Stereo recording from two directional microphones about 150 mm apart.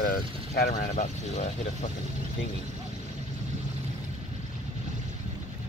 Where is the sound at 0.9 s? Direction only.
50° left (ahead or behind).